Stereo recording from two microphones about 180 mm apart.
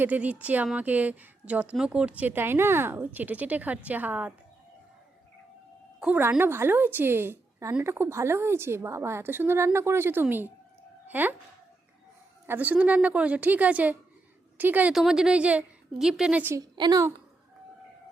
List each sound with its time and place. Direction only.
0.0 s a woman's voice: 10° right (ahead or behind)
6.0 s a woman's voice: 10° right (ahead or behind)
11.0 s a sound: 10° right (ahead or behind)
12.5 s a woman's voice: 10° right (ahead or behind)
16.7 s a woman's voice: 25° right (ahead or behind)